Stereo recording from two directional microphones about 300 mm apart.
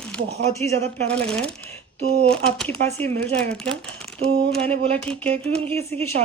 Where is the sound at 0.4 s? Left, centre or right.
Right.